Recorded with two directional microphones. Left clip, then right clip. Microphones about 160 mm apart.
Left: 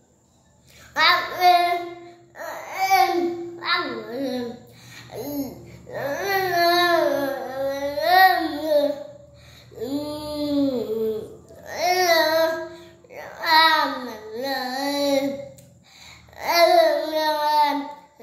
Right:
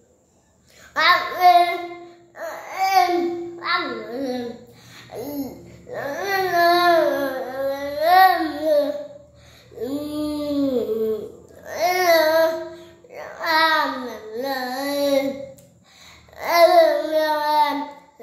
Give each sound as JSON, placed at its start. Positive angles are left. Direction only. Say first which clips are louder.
{"t": 0.9, "sound": "child singing", "louder": "right 1 dB", "side_deg": -15}
{"t": 2.3, "sound": "a sound", "louder": "right 2 dB", "side_deg": -10}
{"t": 3.5, "sound": "music", "louder": "right 1 dB", "side_deg": -10}
{"t": 5.1, "sound": "babbling", "louder": "even", "side_deg": -10}
{"t": 9.8, "sound": "a sound", "louder": "right 2 dB", "side_deg": -20}
{"t": 11.6, "sound": "babbling", "louder": "right 2 dB", "side_deg": -20}
{"t": 16.3, "sound": "babbling", "louder": "right 2 dB", "side_deg": -15}